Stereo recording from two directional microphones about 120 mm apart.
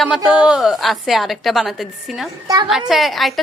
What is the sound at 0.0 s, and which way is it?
A woman's voice, 5° right (ahead or behind).